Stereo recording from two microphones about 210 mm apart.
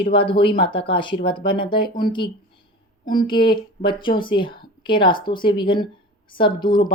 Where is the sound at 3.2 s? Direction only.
25° left (ahead or behind).